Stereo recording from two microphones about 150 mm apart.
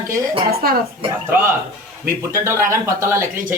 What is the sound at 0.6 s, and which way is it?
Speech, 85° right.